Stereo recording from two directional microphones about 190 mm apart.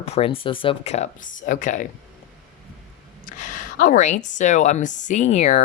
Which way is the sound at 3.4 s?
45° left (ahead or behind).